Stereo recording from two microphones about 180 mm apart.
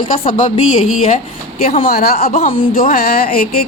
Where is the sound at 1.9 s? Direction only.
55° left (ahead or behind).